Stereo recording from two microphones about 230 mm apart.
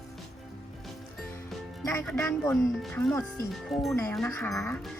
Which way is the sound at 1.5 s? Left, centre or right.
Centre.